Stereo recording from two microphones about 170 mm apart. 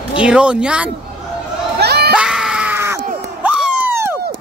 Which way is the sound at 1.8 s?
70° right (ahead or behind).